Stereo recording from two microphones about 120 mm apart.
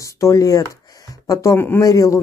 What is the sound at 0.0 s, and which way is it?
Speech, 25° left (ahead or behind).